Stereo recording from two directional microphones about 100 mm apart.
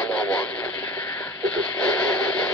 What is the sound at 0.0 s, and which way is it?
Radio, 10° left (ahead or behind).